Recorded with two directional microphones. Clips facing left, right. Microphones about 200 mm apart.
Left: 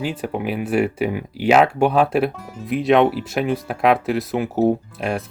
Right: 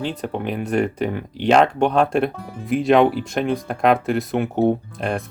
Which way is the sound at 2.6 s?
Centre (ahead or behind).